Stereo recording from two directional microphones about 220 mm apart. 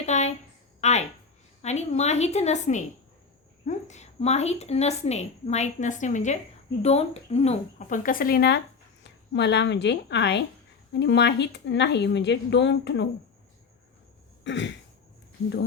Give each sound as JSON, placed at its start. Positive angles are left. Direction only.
{"t": 0.0, "sound": "a sound", "side_deg": 30}
{"t": 0.8, "sound": "a woman's voice", "side_deg": 30}
{"t": 14.4, "sound": "throat clearing", "side_deg": 55}